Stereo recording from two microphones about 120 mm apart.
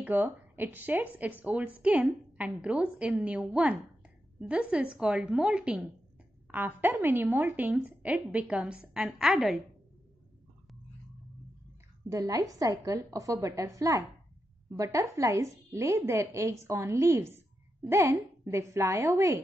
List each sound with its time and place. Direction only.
0.0 s a woman's voice: 15° right (ahead or behind)
12.1 s a woman's voice: 25° right (ahead or behind)